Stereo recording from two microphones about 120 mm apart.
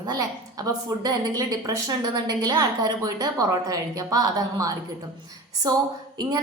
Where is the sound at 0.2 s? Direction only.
30° right (ahead or behind).